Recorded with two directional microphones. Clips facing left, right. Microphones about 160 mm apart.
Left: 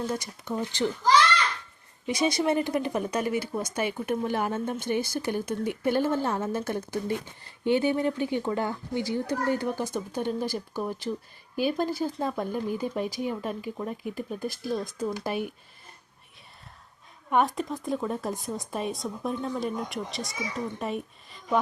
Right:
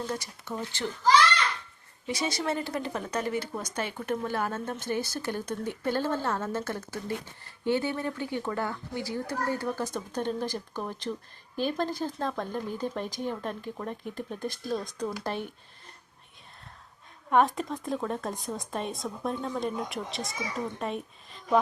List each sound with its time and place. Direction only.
0.1 s speech: 15° left (ahead or behind)
2.0 s speech: 15° left (ahead or behind)
17.2 s a woman's voice: centre (ahead or behind)